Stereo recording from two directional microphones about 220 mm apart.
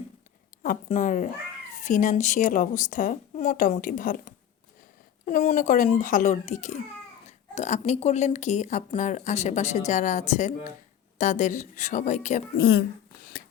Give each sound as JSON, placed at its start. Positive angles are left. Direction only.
{"t": 0.6, "sound": "speech", "side_deg": 35}
{"t": 12.5, "sound": "speech", "side_deg": 50}